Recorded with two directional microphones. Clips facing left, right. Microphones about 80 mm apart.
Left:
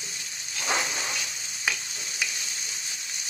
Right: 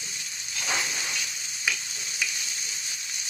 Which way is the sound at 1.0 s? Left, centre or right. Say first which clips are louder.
Left 1 dB; left.